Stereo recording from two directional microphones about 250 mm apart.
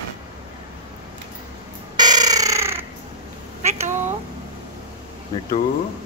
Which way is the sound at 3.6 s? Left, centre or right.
Right.